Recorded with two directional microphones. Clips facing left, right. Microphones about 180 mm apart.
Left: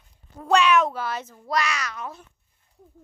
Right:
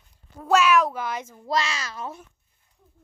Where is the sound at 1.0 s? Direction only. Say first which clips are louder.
Even; 15° right (ahead or behind).